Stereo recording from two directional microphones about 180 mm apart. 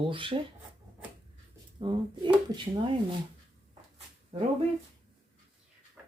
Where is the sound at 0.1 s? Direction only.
30° right (ahead or behind).